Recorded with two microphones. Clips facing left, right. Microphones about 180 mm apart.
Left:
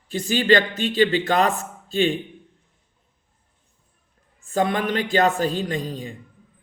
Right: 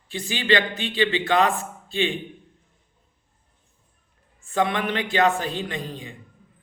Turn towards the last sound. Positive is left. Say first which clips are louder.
# left 5 dB
turn(degrees=40)  # may be behind; listen again after turning